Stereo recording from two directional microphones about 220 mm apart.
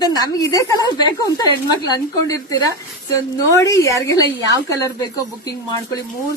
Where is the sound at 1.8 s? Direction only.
15° left (ahead or behind).